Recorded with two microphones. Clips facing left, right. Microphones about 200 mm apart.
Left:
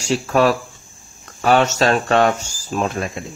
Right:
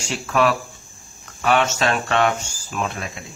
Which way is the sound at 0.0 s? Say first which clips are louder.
Left 4 dB; 35° left (ahead or behind).